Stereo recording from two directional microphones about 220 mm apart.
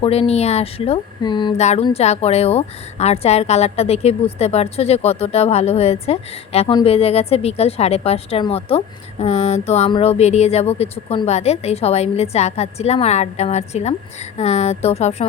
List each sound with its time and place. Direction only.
0.0 s speech: 25° left (ahead or behind)